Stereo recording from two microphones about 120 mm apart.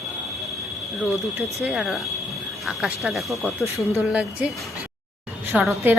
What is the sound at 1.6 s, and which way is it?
Speech, 5° right (ahead or behind).